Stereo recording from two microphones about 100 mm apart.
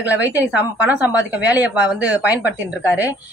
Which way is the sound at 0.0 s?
15° right (ahead or behind).